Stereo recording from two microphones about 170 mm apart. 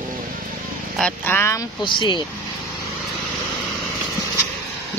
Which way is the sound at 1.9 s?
25° left (ahead or behind).